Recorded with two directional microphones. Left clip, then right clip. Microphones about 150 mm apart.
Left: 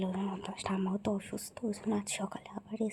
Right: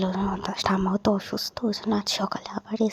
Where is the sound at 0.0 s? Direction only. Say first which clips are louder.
Right 10 dB; 25° right (ahead or behind).